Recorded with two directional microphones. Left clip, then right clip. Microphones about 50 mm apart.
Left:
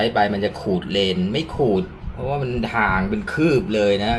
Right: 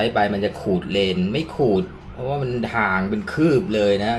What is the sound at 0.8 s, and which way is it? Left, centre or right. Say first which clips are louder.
Speech: left 2 dB; right.